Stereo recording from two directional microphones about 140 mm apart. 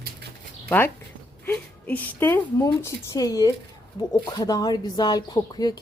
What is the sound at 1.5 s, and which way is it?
Speech, 15° left (ahead or behind).